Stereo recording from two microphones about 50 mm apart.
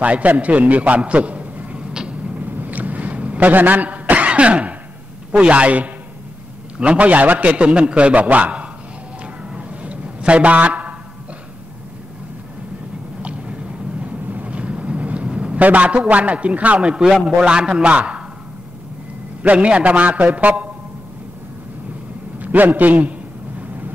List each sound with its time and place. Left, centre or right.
0.0 s a man's voice: right
2.0 s vehicle: right
2.3 s a sound: right
5.3 s a man's voice: right
9.2 s a sound: right
13.2 s vehicle: right
17.5 s a man's voice: centre
19.4 s a man's voice: right
22.4 s a man's voice: right